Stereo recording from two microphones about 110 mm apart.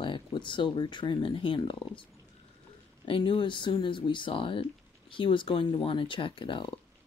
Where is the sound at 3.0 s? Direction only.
50° left (ahead or behind).